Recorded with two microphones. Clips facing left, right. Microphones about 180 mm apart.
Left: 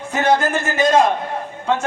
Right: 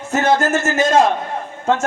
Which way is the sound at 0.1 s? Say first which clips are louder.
Right 1 dB; 45° right (ahead or behind).